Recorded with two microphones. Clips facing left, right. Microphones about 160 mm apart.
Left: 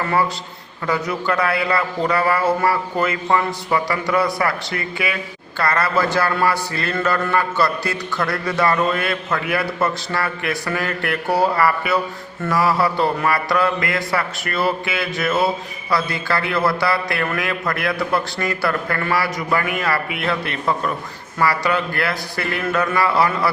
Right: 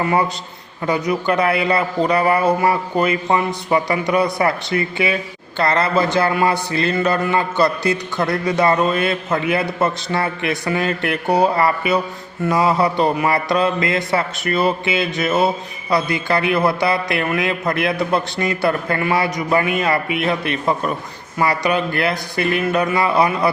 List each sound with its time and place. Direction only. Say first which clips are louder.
0.0 s a man's voice: right 2 dB; 20° right (ahead or behind)
0.9 s music: right 3 dB; 20° right (ahead or behind)